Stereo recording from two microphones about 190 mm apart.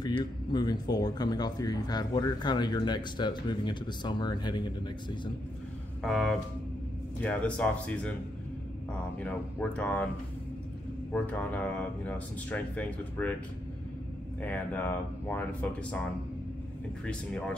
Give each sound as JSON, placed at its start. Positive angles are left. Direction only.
{"t": 0.0, "sound": "speech", "side_deg": 20}
{"t": 6.0, "sound": "speech", "side_deg": 0}
{"t": 9.2, "sound": "speech", "side_deg": 5}
{"t": 11.1, "sound": "speech", "side_deg": 10}
{"t": 14.4, "sound": "speech", "side_deg": 10}
{"t": 17.0, "sound": "speech", "side_deg": 5}